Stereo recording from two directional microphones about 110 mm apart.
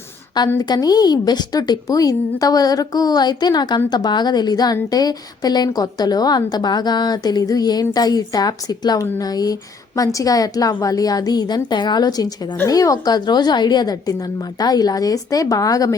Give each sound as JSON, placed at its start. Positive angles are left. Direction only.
{"t": 0.6, "sound": "a woman's voice", "side_deg": 35}